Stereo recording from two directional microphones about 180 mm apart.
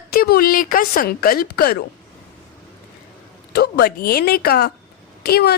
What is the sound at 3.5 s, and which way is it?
Speech, 65° left (ahead or behind).